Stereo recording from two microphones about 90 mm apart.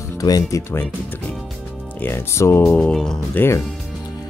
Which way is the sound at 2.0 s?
25° left (ahead or behind).